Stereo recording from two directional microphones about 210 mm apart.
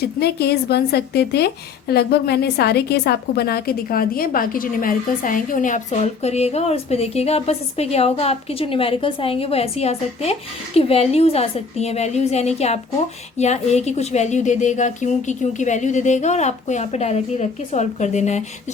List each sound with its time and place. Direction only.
0.0 s a woman's voice: 50° left (ahead or behind); by 18.4 s 35° left (ahead or behind)